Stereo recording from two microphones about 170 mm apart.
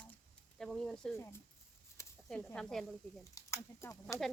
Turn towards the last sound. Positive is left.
turn(degrees=15)  # may be behind; listen again after turning